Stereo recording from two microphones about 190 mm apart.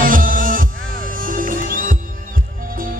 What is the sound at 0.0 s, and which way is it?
Music, 45° right (ahead or behind).